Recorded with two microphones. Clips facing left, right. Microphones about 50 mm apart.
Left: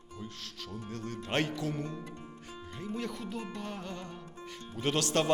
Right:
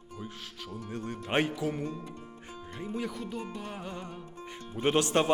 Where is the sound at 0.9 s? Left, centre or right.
Centre.